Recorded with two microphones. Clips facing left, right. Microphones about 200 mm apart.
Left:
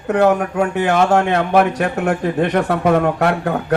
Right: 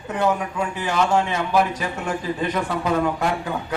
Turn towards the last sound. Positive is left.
turn(degrees=70)  # may be behind; listen again after turning